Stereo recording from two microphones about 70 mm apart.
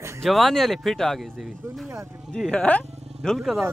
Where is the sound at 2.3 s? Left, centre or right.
Centre.